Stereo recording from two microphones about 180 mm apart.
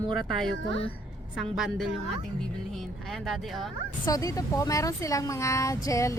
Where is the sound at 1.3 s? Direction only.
Centre (ahead or behind).